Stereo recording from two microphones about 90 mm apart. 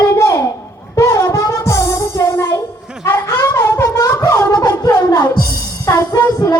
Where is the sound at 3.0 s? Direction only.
35° left (ahead or behind).